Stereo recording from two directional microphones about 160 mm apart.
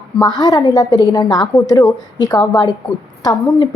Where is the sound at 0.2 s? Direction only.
25° left (ahead or behind).